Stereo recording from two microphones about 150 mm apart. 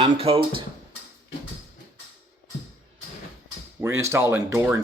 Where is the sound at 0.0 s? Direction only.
40° right (ahead or behind).